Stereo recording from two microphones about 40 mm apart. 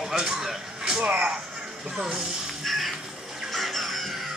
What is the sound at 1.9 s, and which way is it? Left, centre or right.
Speech, centre.